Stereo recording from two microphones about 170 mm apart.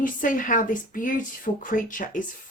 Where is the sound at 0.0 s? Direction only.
50° left (ahead or behind).